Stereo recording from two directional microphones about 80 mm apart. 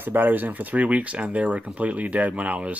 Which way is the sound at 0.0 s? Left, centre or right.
Right.